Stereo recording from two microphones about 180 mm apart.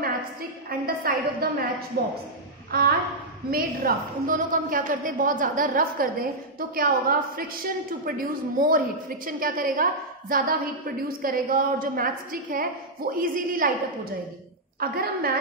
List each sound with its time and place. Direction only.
0.0 s a woman's voice: 55° right (ahead or behind)
3.4 s a woman's voice: 55° right (ahead or behind)
14.8 s a woman's voice: 55° right (ahead or behind)